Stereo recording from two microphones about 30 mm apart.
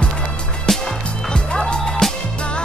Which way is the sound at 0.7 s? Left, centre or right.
Centre.